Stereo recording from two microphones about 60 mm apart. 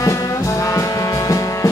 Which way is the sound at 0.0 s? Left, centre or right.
Left.